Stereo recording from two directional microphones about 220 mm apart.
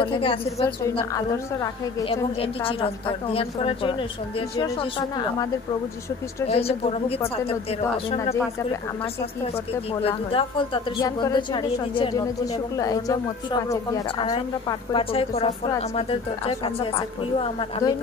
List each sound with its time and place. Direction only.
0.0 s a woman's voice: 25° left (ahead or behind)
6.5 s a woman's voice: 25° left (ahead or behind)
10.0 s a woman's voice: 25° left (ahead or behind)